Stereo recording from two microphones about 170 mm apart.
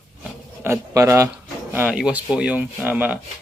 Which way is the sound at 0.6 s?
15° right (ahead or behind).